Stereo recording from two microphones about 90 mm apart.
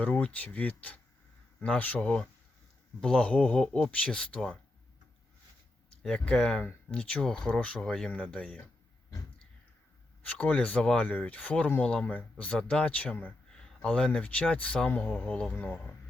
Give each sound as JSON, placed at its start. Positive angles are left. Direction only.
{"t": 0.0, "sound": "speech", "side_deg": 15}
{"t": 6.1, "sound": "speech", "side_deg": 10}
{"t": 10.2, "sound": "speech", "side_deg": 10}